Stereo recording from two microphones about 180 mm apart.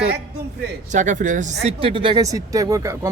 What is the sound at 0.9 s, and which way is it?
Speech, 45° right (ahead or behind).